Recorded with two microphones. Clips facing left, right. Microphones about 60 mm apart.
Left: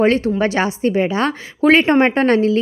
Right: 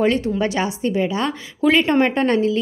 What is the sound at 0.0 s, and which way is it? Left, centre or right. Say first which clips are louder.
A woman's voice: left 3 dB; left.